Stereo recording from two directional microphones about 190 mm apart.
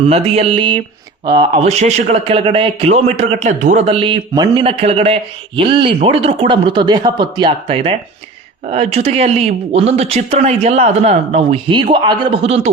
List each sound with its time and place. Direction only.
0.0 s a man's voice: 30° right (ahead or behind)